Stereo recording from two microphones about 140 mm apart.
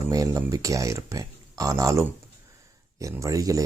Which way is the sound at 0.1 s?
25° right (ahead or behind).